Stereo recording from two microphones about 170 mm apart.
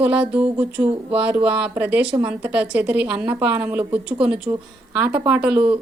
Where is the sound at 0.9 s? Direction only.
35° right (ahead or behind).